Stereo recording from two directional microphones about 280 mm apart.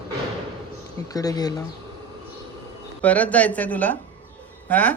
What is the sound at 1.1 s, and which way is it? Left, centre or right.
Speech, centre.